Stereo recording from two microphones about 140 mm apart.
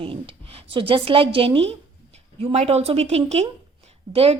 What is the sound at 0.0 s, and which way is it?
A woman's voice, 40° right (ahead or behind).